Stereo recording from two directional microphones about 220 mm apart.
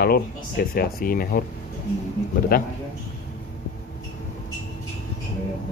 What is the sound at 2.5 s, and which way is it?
Speech, 40° left (ahead or behind).